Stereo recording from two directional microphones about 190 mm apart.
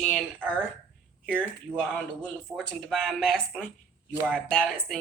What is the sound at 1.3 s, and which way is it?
Speech, 5° left (ahead or behind).